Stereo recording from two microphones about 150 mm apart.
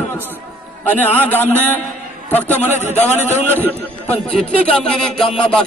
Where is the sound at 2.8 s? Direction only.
50° left (ahead or behind).